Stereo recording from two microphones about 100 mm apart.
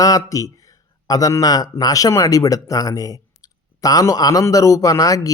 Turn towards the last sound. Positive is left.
turn(degrees=35)  # may be behind; listen again after turning